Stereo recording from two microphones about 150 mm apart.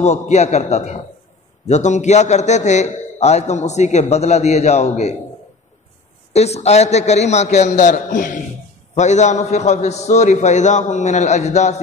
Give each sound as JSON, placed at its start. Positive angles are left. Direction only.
{"t": 0.0, "sound": "a man's voice", "side_deg": 50}
{"t": 6.3, "sound": "a man's voice", "side_deg": 45}